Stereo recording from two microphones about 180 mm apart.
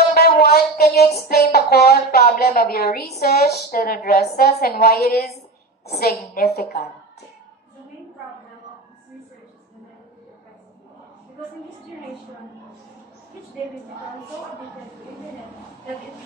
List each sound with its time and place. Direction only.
0.1 s music: 60° left (ahead or behind)